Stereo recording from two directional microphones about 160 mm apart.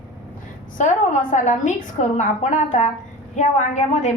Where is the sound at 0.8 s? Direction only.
50° left (ahead or behind).